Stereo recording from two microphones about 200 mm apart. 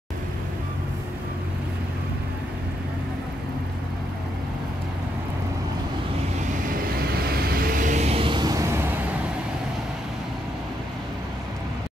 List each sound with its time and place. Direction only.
6.7 s vehicle: 50° right (ahead or behind); by 8.9 s 15° right (ahead or behind)